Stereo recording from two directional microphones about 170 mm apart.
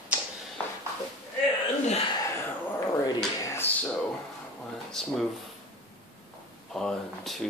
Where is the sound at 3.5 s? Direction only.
10° left (ahead or behind).